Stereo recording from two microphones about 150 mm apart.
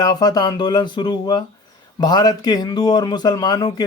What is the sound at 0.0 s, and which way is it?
A man's voice, 25° left (ahead or behind).